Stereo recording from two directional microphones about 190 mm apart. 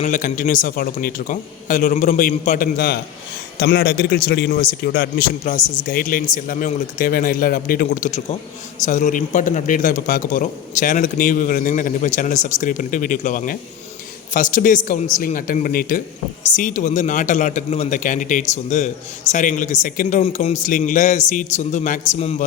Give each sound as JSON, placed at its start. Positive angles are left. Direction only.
{"t": 0.0, "sound": "a man's voice", "side_deg": 40}
{"t": 5.5, "sound": "speech", "side_deg": 20}
{"t": 5.9, "sound": "a man's voice", "side_deg": 50}